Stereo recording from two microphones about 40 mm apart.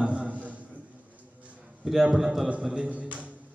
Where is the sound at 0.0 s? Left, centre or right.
Right.